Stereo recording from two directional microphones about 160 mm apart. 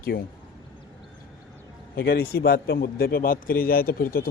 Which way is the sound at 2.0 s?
75° left (ahead or behind).